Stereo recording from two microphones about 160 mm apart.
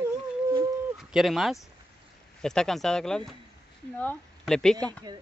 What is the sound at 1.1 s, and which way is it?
Speech, centre (ahead or behind).